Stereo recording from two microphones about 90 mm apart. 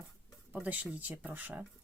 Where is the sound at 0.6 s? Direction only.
15° right (ahead or behind).